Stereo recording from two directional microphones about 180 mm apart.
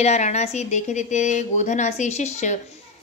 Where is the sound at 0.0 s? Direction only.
40° left (ahead or behind).